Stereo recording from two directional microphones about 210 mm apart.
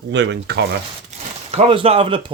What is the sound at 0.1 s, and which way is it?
Speech, 55° right (ahead or behind).